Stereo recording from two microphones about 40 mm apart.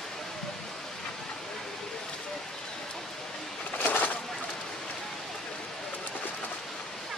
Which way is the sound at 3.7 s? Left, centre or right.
Left.